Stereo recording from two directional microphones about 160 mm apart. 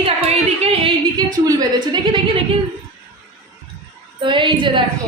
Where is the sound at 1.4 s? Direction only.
25° right (ahead or behind).